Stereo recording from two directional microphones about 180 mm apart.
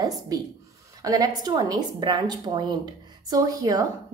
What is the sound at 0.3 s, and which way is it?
A woman's voice, 20° right (ahead or behind).